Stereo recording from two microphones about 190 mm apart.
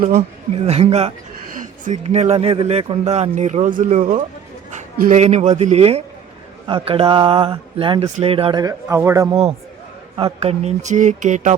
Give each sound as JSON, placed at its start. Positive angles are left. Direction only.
{"t": 0.5, "sound": "speech", "side_deg": -35}
{"t": 1.5, "sound": "speech", "side_deg": -45}
{"t": 9.3, "sound": "speech", "side_deg": -30}